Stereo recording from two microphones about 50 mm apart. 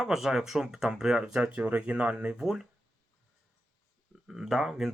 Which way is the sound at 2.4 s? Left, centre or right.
Centre.